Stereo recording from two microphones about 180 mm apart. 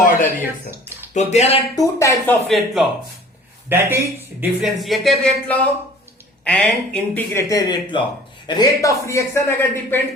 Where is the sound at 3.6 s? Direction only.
10° right (ahead or behind).